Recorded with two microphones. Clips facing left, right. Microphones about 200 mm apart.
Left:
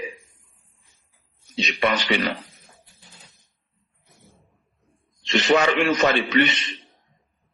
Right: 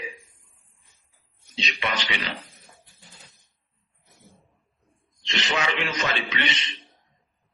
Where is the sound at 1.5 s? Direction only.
50° left (ahead or behind).